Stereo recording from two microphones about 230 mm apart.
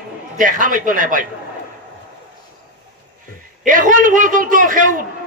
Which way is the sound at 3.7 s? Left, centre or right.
Right.